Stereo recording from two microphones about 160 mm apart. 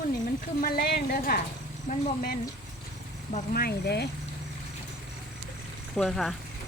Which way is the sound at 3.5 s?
80° left.